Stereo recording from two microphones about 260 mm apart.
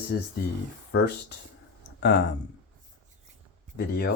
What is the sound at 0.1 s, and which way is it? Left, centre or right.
Speech, left.